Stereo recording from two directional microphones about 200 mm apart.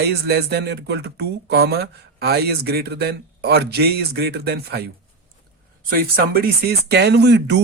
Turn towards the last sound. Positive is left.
turn(degrees=-60)  # may be behind; listen again after turning